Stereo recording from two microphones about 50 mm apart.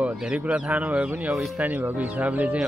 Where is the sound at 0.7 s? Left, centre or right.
Right.